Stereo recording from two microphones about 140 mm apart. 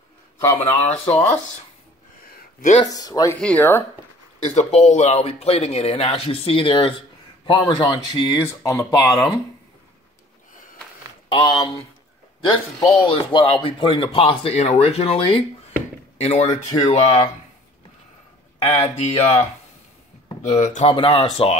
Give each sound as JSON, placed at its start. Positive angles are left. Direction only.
{"t": 0.6, "sound": "speech", "side_deg": 15}
{"t": 2.2, "sound": "a sound", "side_deg": 90}
{"t": 2.9, "sound": "speech", "side_deg": 25}
{"t": 3.3, "sound": "speech", "side_deg": 10}
{"t": 4.6, "sound": "speech", "side_deg": 55}
{"t": 11.2, "sound": "speech", "side_deg": 35}
{"t": 12.8, "sound": "speech", "side_deg": 35}
{"t": 18.7, "sound": "speech", "side_deg": 50}
{"t": 20.4, "sound": "speech", "side_deg": 55}
{"t": 20.9, "sound": "speech", "side_deg": 40}